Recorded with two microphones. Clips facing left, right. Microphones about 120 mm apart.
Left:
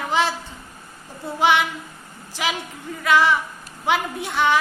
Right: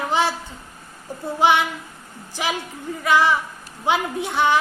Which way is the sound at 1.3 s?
20° right (ahead or behind).